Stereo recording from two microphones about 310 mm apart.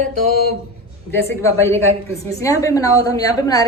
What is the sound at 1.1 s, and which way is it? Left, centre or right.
A woman's voice, centre.